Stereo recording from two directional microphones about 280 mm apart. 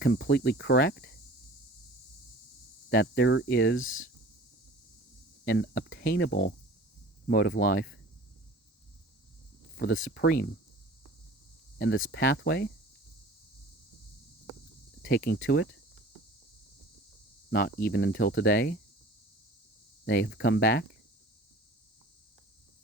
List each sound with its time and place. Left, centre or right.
0.0 s speech: left
2.9 s speech: left
5.5 s speech: left
9.7 s speech: left
11.8 s speech: left
15.0 s speech: left
17.5 s speech: left
20.1 s speech: left